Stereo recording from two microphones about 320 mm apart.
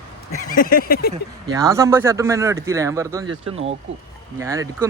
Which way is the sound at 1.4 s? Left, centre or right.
Centre.